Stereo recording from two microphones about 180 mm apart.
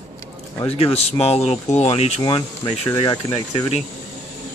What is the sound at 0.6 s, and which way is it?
Speech, 35° left (ahead or behind).